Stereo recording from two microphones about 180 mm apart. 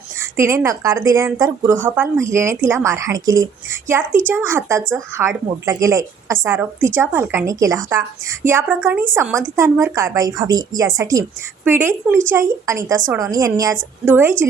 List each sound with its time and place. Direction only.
0.2 s a woman's voice: 15° right (ahead or behind)